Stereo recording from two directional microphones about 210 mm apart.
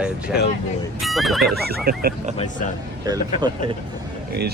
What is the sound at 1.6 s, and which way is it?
Speech, 45° right (ahead or behind).